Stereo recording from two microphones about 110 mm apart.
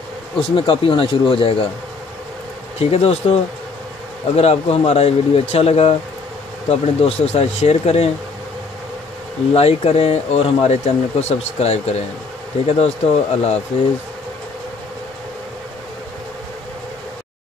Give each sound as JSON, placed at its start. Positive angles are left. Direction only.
{"t": 0.4, "sound": "speech", "side_deg": 55}
{"t": 2.8, "sound": "speech", "side_deg": 70}
{"t": 9.5, "sound": "speech", "side_deg": 70}